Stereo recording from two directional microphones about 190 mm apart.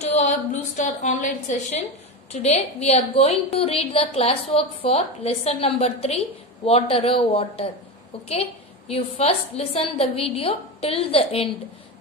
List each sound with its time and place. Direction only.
0.0 s a woman's voice: 40° left (ahead or behind)